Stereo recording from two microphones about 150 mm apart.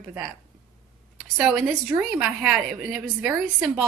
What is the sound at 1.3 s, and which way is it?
A woman's voice, 10° right (ahead or behind).